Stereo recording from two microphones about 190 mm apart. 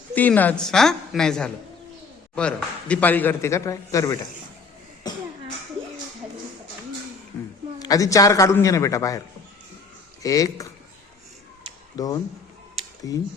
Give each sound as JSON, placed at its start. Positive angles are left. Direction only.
{"t": 0.1, "sound": "a woman's voice", "side_deg": 10}
{"t": 5.0, "sound": "cough", "side_deg": 20}
{"t": 7.3, "sound": "a sound", "side_deg": 20}
{"t": 7.8, "sound": "a man's voice", "side_deg": 20}
{"t": 10.2, "sound": "a man's voice", "side_deg": 15}
{"t": 11.9, "sound": "a man's voice", "side_deg": 20}